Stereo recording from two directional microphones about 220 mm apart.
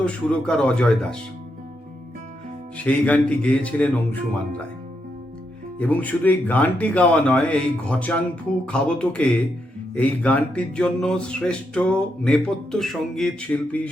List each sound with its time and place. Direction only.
0.0 s music: 5° left (ahead or behind)
2.7 s speech: 5° left (ahead or behind)
5.8 s speech: 5° left (ahead or behind)
8.6 s music: 5° left (ahead or behind)